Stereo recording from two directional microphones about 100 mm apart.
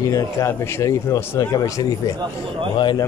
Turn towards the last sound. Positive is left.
turn(degrees=50)  # may be behind; listen again after turning